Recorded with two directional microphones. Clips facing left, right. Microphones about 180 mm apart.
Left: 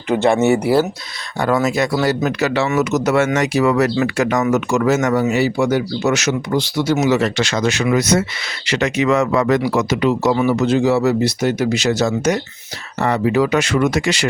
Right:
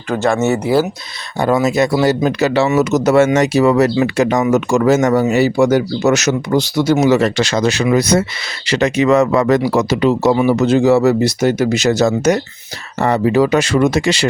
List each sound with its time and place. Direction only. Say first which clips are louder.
0.1 s speech: left 1 dB; 20° left (ahead or behind)
1.4 s speech: right 3 dB; 20° right (ahead or behind)
10.7 s speech: right 4 dB; 45° right (ahead or behind); by 14.3 s 30° right (ahead or behind)